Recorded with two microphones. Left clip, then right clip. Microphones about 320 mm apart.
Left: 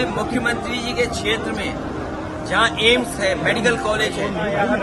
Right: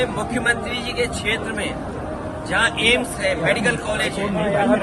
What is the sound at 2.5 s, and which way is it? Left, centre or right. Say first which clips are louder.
Speech: left 2 dB; centre.